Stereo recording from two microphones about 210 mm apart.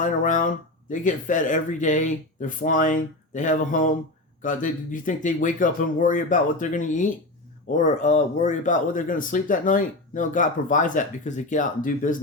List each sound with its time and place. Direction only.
0.0 s speech: 40° left (ahead or behind)